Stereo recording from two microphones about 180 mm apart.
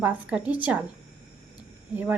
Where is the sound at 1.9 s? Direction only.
10° right (ahead or behind).